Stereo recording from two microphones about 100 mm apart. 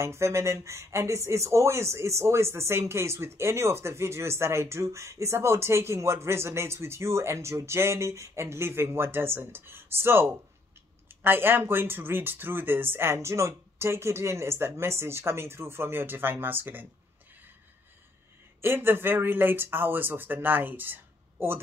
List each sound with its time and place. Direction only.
0.0 s speech: 25° right (ahead or behind)
18.6 s speech: 20° right (ahead or behind)